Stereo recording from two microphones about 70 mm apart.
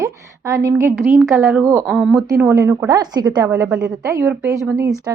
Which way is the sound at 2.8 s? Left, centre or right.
Right.